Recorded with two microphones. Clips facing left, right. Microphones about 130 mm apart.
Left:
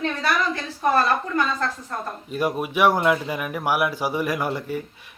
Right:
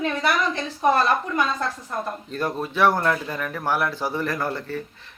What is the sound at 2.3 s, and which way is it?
A man's voice, 10° left (ahead or behind).